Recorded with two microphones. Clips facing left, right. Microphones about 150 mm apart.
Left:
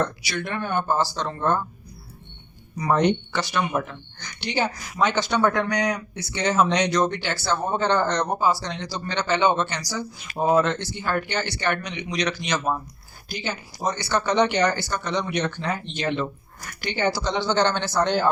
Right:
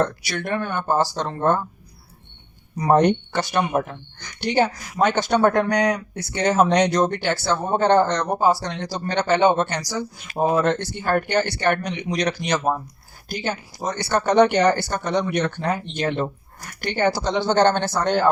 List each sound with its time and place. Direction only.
0.2 s speech: 55° right (ahead or behind)
2.7 s speech: 35° right (ahead or behind)
3.0 s speech: 50° right (ahead or behind)
3.7 s speech: 40° right (ahead or behind)
4.4 s speech: 50° right (ahead or behind)